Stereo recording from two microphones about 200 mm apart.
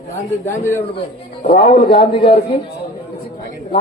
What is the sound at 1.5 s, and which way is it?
Speech, 30° left (ahead or behind).